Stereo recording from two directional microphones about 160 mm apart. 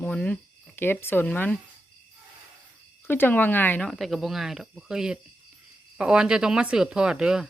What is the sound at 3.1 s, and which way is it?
Speech, 10° left (ahead or behind).